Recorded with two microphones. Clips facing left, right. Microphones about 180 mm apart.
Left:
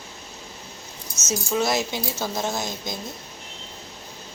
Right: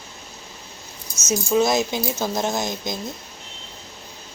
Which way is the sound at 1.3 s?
20° right (ahead or behind).